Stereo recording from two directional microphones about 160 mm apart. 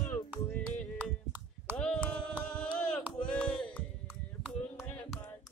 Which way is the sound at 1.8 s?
5° left (ahead or behind).